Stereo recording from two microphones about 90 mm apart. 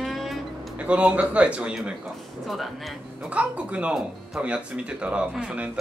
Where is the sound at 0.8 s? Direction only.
15° right (ahead or behind).